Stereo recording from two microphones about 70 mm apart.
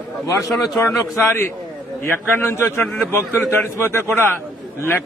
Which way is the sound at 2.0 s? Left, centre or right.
Left.